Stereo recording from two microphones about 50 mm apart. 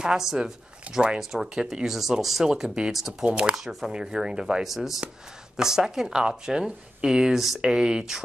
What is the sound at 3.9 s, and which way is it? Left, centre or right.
Speech, centre.